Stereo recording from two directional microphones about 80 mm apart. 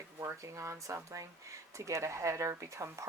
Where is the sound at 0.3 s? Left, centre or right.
Right.